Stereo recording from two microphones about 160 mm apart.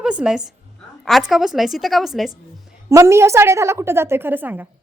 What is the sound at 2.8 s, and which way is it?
A woman's voice, 15° right (ahead or behind).